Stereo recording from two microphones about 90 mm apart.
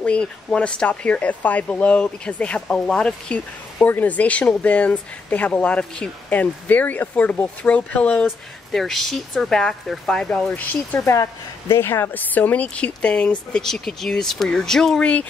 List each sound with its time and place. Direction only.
0.0 s speech: 10° left (ahead or behind)
8.3 s speech: centre (ahead or behind)
10.5 s speech: 20° left (ahead or behind)
11.0 s speech: 35° left (ahead or behind); by 15.0 s 5° left (ahead or behind)